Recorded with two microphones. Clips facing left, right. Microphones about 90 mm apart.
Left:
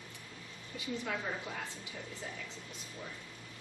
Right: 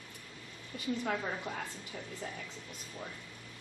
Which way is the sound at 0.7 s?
45° right (ahead or behind).